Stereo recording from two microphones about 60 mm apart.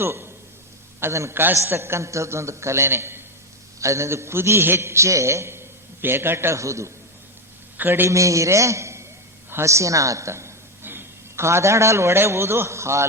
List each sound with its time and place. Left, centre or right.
0.0 s a man's voice: right
1.3 s a man's voice: right
3.8 s a man's voice: right
6.6 s a woman's voice: right
7.8 s a man's voice: right
8.1 s a man's voice: right